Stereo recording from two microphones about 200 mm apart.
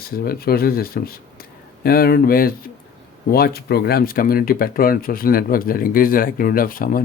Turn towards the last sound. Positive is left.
turn(degrees=45)  # may be behind; listen again after turning